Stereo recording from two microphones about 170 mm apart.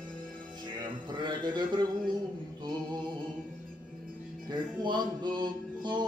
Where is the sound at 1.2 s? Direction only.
25° right (ahead or behind).